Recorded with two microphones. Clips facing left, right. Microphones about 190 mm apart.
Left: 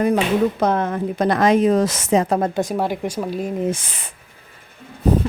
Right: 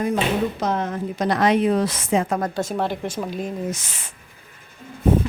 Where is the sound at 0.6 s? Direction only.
55° left (ahead or behind).